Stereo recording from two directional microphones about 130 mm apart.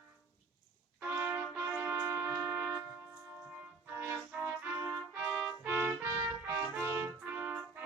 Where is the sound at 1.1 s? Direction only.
20° right (ahead or behind).